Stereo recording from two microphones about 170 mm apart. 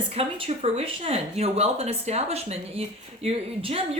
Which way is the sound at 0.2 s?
35° right (ahead or behind).